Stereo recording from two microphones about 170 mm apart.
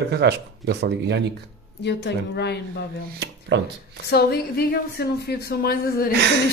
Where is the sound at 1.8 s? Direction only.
80° left.